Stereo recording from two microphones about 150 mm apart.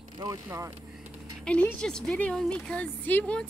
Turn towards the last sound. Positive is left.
turn(degrees=10)  # may be behind; listen again after turning